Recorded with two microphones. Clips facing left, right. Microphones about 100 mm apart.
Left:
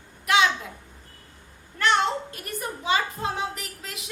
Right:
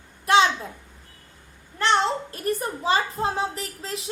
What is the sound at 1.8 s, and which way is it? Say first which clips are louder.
A woman's voice: right 1 dB; 30° right (ahead or behind).